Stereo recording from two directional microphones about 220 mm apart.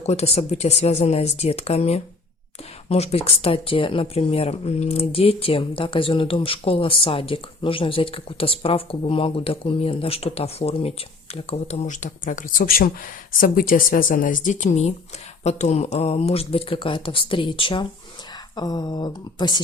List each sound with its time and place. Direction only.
0.0 s speech: 30° left (ahead or behind)